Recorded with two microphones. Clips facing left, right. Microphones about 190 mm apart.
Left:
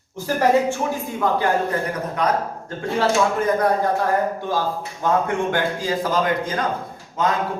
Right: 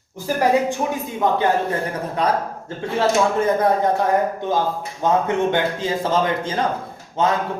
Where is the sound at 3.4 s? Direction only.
25° right (ahead or behind).